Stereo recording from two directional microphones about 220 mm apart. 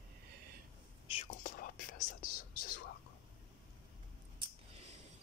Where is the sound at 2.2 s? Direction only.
40° left (ahead or behind).